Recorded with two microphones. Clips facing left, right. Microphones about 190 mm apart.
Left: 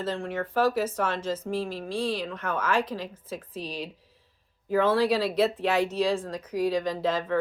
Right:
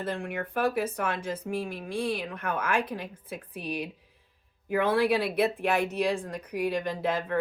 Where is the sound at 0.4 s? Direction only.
55° right (ahead or behind).